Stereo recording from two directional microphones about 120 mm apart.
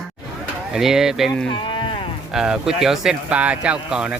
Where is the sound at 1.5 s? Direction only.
45° left (ahead or behind).